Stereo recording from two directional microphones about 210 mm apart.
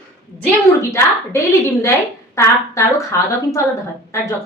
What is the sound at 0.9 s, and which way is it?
A woman's voice, 15° left (ahead or behind).